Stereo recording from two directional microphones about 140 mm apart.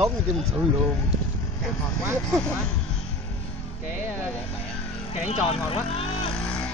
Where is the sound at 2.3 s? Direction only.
5° left (ahead or behind).